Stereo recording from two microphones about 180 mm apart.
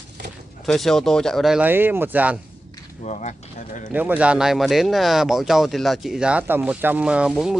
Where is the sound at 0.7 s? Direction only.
Centre (ahead or behind).